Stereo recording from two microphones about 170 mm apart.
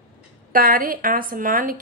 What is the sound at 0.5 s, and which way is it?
A woman's voice, 55° right (ahead or behind).